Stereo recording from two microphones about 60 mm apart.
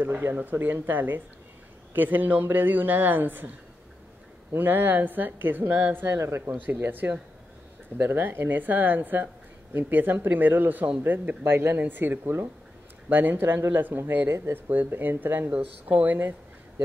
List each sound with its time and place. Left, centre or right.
0.0 s a woman's voice: right
6.1 s speech: right
6.5 s a woman's voice: right